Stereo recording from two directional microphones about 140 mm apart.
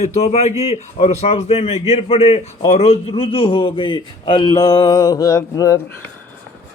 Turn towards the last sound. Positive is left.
turn(degrees=25)  # may be behind; listen again after turning